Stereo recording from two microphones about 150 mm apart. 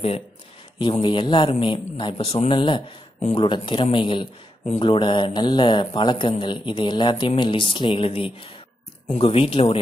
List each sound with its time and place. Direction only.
0.7 s speech: 35° left (ahead or behind)